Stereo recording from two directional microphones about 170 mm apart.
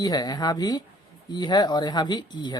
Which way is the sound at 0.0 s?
25° left (ahead or behind).